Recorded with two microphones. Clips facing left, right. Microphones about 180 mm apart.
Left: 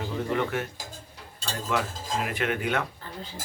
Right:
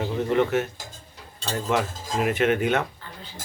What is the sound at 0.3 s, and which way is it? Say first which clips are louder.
Speech: right 8 dB; 20° right (ahead or behind).